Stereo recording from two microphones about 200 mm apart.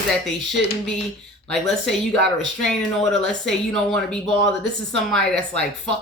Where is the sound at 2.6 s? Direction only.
Centre (ahead or behind).